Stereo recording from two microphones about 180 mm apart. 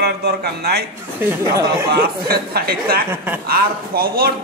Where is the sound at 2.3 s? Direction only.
55° right (ahead or behind).